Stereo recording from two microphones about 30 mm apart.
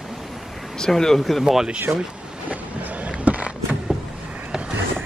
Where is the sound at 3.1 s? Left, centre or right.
Right.